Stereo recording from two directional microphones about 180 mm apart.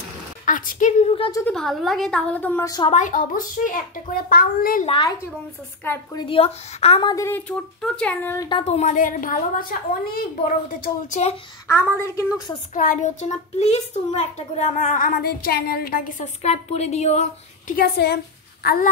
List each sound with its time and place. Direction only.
0.5 s a child's voice: 45° left (ahead or behind)
1.5 s a woman's voice: centre (ahead or behind); by 2.9 s 20° left (ahead or behind)
2.9 s a child's voice: 45° left (ahead or behind)
4.8 s a woman's voice: 30° left (ahead or behind)
6.1 s a woman's voice: 30° left (ahead or behind)
7.2 s speech: 10° left (ahead or behind)
8.5 s a child's voice: 30° left (ahead or behind)
11.6 s speech: 15° left (ahead or behind)
12.7 s a child's voice: 45° left (ahead or behind)
17.7 s a woman's voice: 60° left (ahead or behind)